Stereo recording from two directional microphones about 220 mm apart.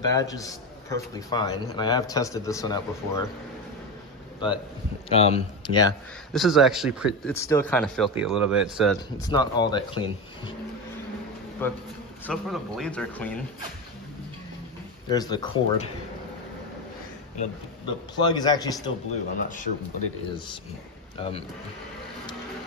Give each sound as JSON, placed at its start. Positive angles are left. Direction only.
{"t": 0.0, "sound": "a man's voice", "side_deg": 15}
{"t": 5.1, "sound": "a man's voice", "side_deg": 25}
{"t": 6.3, "sound": "speech", "side_deg": 0}
{"t": 7.3, "sound": "a man's voice", "side_deg": 10}
{"t": 9.3, "sound": "a man's voice", "side_deg": 20}
{"t": 11.6, "sound": "a man's voice", "side_deg": 10}
{"t": 15.0, "sound": "a man's voice", "side_deg": 20}
{"t": 17.4, "sound": "a man's voice", "side_deg": 20}
{"t": 19.3, "sound": "speech", "side_deg": 35}
{"t": 21.2, "sound": "a man's voice", "side_deg": 25}